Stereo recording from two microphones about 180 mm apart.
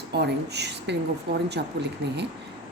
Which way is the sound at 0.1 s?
70° right (ahead or behind).